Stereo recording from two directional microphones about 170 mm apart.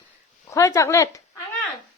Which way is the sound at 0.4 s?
15° left (ahead or behind).